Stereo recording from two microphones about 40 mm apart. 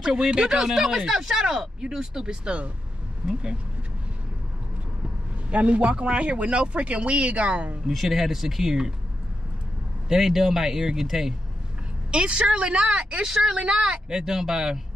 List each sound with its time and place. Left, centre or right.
0.0 s speech: centre
2.4 s speech: right
5.5 s speech: right
7.9 s speech: centre
10.0 s speech: centre
12.1 s speech: right
14.1 s speech: centre